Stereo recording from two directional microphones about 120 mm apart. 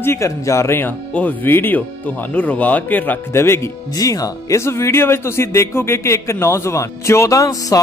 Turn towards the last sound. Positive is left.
turn(degrees=30)  # may be behind; listen again after turning